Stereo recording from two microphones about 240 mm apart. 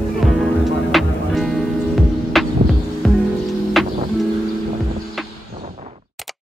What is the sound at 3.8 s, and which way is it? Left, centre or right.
Music, centre.